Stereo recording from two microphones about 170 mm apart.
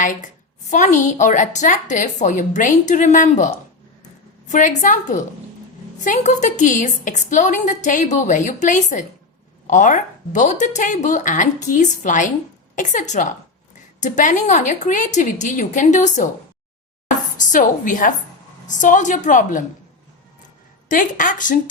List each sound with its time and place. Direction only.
0.0 s a woman's voice: 50° left (ahead or behind)
17.3 s a woman's voice: 50° left (ahead or behind)
20.8 s a woman's voice: 50° left (ahead or behind)